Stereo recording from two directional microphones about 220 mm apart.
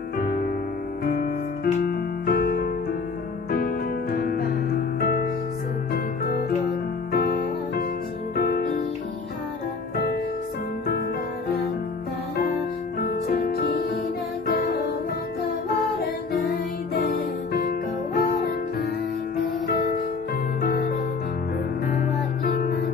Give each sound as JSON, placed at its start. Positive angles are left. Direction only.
{"t": 0.2, "sound": "music", "side_deg": 40}
{"t": 13.0, "sound": "music", "side_deg": 45}
{"t": 17.1, "sound": "music", "side_deg": 45}
{"t": 21.9, "sound": "music", "side_deg": 45}